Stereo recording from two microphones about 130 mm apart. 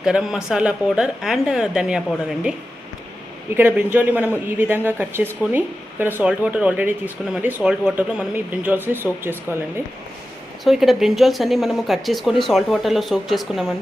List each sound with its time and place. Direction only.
0.0 s speech: 5° right (ahead or behind)
3.5 s speech: 15° right (ahead or behind)
10.6 s speech: centre (ahead or behind)